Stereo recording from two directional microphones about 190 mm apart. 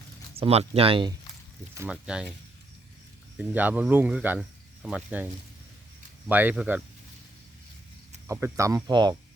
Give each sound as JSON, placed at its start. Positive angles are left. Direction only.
{"t": 0.3, "sound": "speech", "side_deg": -30}
{"t": 1.7, "sound": "speech", "side_deg": -10}
{"t": 3.3, "sound": "speech", "side_deg": -10}
{"t": 8.3, "sound": "speech", "side_deg": -15}